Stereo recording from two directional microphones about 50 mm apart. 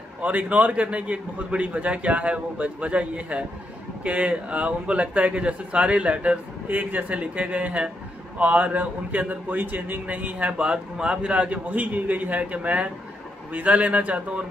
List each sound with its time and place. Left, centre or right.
0.2 s a man's voice: right